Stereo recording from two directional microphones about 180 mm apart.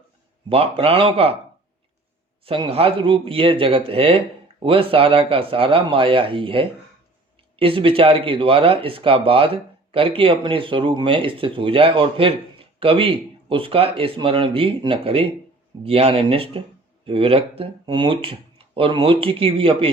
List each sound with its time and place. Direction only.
0.4 s speech: 30° right (ahead or behind)
2.4 s speech: 30° right (ahead or behind)